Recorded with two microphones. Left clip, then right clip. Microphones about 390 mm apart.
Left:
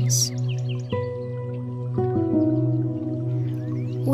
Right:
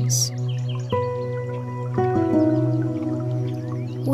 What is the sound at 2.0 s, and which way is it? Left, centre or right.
Music, right.